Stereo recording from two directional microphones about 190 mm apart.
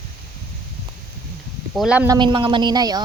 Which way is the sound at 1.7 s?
5° right (ahead or behind).